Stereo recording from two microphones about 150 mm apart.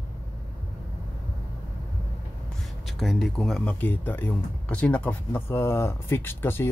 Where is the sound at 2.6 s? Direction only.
Centre (ahead or behind).